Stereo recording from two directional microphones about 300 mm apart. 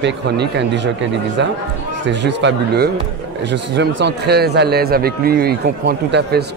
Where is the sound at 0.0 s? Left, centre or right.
Right.